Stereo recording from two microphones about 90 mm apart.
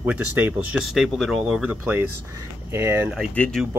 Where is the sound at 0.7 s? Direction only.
5° right (ahead or behind).